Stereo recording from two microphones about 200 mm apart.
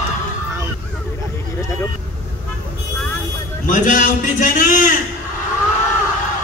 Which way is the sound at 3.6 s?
40° left (ahead or behind).